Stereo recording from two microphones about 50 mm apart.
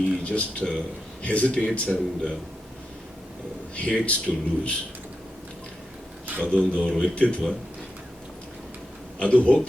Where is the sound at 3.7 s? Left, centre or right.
Left.